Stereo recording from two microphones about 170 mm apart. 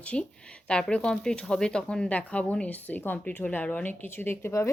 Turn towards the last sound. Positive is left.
turn(degrees=15)  # may be behind; listen again after turning